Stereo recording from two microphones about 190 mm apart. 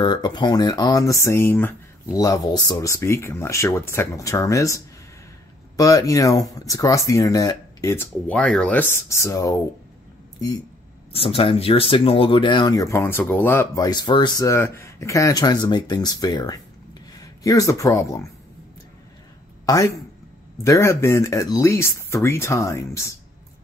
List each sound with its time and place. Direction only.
0.0 s speech: 20° left (ahead or behind)
11.1 s speech: 30° left (ahead or behind)
19.6 s speech: 20° left (ahead or behind)